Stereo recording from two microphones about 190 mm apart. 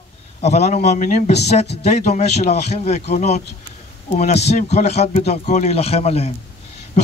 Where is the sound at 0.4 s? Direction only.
35° left (ahead or behind).